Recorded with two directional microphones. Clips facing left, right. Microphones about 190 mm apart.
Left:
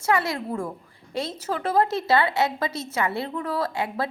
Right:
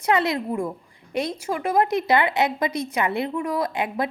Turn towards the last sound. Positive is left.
turn(degrees=-15)  # may be behind; listen again after turning